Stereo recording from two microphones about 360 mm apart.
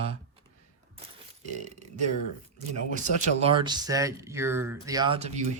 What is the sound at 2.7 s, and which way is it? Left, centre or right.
Speech, centre.